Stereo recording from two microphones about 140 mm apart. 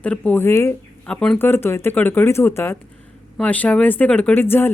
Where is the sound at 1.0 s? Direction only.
5° left (ahead or behind).